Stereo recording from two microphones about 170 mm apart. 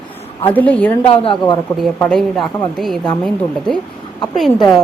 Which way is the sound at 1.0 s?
30° left (ahead or behind).